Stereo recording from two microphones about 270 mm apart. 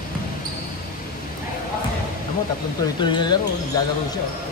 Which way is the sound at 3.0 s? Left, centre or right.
Centre.